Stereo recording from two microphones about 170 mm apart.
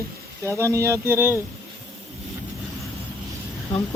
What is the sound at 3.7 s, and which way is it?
Speech, 20° left (ahead or behind).